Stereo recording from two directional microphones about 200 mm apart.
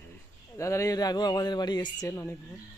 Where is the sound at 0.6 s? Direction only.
15° left (ahead or behind).